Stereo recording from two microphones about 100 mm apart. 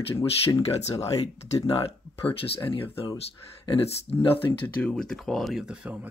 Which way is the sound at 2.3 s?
70° left (ahead or behind).